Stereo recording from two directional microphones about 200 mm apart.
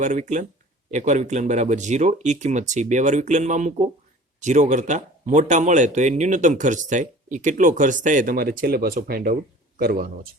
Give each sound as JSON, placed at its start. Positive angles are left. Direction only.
{"t": 0.0, "sound": "speech", "side_deg": -40}